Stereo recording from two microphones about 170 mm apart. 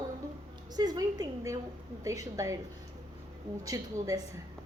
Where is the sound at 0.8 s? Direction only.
20° right (ahead or behind).